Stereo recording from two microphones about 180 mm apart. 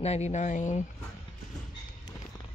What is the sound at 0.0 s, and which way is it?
Speech, 35° left (ahead or behind).